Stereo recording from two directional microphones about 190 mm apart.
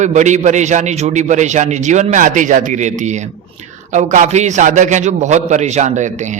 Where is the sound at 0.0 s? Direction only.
40° right (ahead or behind).